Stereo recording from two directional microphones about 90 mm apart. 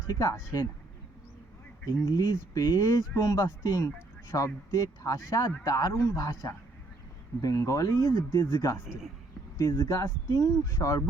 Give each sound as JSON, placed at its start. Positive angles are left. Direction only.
{"t": 0.1, "sound": "speech", "side_deg": 40}
{"t": 2.1, "sound": "speech", "side_deg": 45}